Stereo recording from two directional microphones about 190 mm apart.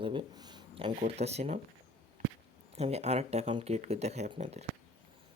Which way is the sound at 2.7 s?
35° right (ahead or behind).